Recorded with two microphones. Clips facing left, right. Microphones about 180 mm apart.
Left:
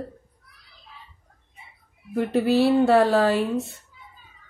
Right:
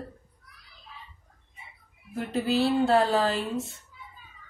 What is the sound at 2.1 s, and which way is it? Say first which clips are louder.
Speech: left 6 dB; 65° left (ahead or behind).